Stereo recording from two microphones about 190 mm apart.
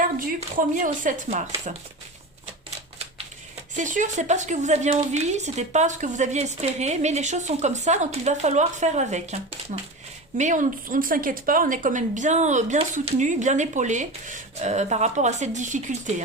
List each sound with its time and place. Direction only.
0.3 s speech: 45° right (ahead or behind)
3.8 s speech: 40° right (ahead or behind)